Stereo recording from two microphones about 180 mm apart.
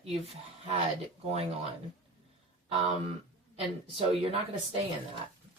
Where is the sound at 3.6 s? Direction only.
30° right (ahead or behind).